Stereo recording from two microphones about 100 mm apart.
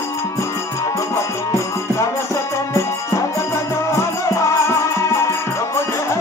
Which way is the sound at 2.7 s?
30° left (ahead or behind).